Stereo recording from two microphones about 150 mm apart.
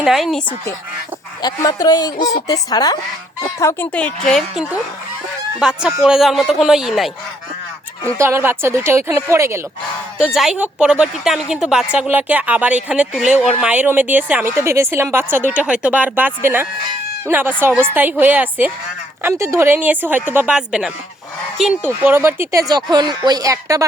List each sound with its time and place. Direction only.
0.0 s a woman's voice: centre (ahead or behind)
1.4 s speech: 25° left (ahead or behind)
3.9 s a woman's voice: 5° left (ahead or behind)
8.0 s a woman's voice: 15° right (ahead or behind)
10.2 s a woman's voice: centre (ahead or behind)
22.7 s speech: 25° right (ahead or behind)